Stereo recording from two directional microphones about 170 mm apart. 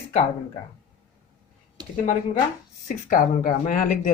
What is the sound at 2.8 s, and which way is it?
Speech, 50° left (ahead or behind).